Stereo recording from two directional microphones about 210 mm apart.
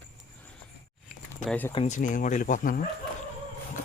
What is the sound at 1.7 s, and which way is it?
Speech, 30° left (ahead or behind).